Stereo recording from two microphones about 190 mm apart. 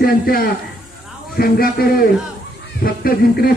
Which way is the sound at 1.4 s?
55° left (ahead or behind).